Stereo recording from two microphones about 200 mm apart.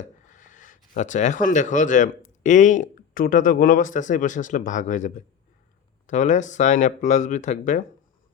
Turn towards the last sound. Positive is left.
turn(degrees=40)  # may be behind; listen again after turning